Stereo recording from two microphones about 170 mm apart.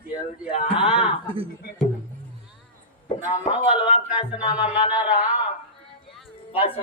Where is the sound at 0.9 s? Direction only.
5° right (ahead or behind).